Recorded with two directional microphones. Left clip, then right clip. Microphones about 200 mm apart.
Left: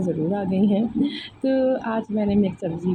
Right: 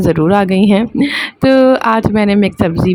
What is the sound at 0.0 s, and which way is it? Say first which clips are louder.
Speech: right 14 dB; 55° right (ahead or behind).